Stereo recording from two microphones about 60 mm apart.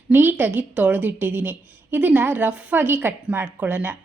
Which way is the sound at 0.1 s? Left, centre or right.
Right.